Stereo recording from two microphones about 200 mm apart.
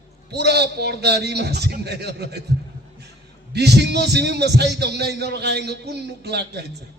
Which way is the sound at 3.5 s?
55° right (ahead or behind).